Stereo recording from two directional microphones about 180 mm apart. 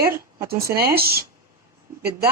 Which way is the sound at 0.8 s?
60° right (ahead or behind).